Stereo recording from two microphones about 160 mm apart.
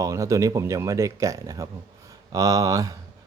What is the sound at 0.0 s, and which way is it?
Speech, 20° right (ahead or behind).